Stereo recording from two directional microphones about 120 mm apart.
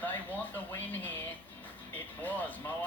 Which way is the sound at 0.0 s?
15° left (ahead or behind).